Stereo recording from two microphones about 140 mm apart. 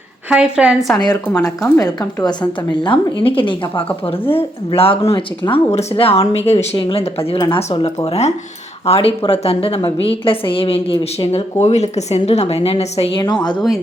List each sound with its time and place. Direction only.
0.3 s a woman's voice: 5° right (ahead or behind)
1.6 s a woman's voice: 25° left (ahead or behind); by 6.7 s 50° left (ahead or behind)
6.7 s a woman's voice: 35° left (ahead or behind)
7.0 s a woman's voice: 45° left (ahead or behind)
13.2 s speech: 30° left (ahead or behind)